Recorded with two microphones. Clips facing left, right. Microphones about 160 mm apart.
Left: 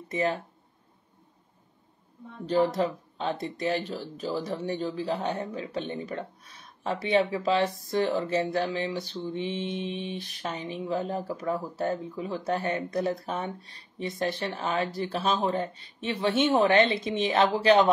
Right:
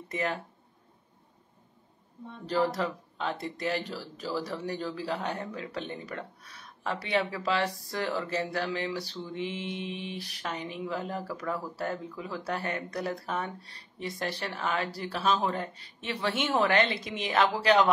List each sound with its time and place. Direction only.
0.1 s speech: 25° left (ahead or behind)
2.4 s speech: 20° left (ahead or behind)